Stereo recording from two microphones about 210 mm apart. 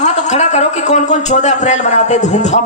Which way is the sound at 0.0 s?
35° left (ahead or behind).